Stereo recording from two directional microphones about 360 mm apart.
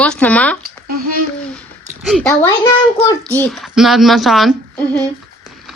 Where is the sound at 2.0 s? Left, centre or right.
Centre.